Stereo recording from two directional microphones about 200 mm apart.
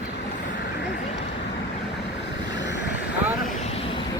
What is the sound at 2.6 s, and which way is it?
Vehicle, 60° left (ahead or behind).